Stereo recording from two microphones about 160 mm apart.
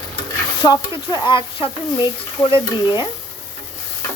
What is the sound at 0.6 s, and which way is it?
Speech, 25° left (ahead or behind).